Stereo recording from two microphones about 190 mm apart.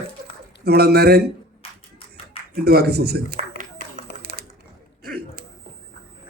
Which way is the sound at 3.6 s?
45° right (ahead or behind).